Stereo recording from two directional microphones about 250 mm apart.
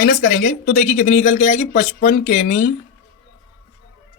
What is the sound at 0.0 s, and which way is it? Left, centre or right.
A man's voice, left.